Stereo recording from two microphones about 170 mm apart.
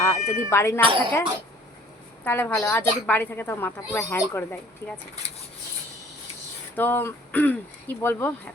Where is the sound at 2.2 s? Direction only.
10° left (ahead or behind).